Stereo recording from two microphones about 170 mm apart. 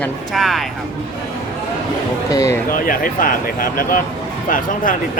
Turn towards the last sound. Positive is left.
turn(degrees=55)  # may be behind; listen again after turning